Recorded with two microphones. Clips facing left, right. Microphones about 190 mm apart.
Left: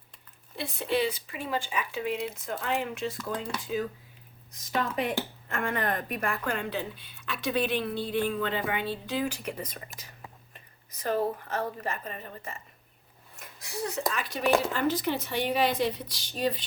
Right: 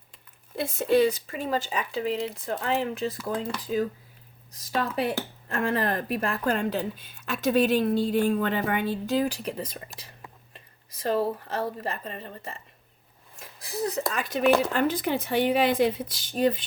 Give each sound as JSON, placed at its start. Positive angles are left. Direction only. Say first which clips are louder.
{"t": 0.5, "sound": "a woman's voice", "louder": "right 7 dB", "side_deg": -45}
{"t": 11.0, "sound": "speech", "louder": "right 3 dB", "side_deg": -30}
{"t": 13.4, "sound": "a sound", "louder": "right 5 dB", "side_deg": -35}
{"t": 14.1, "sound": "a woman's voice", "louder": "right 4 dB", "side_deg": -45}